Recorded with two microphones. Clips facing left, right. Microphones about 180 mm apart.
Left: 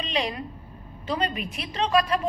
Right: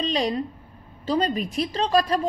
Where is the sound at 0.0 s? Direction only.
40° right (ahead or behind).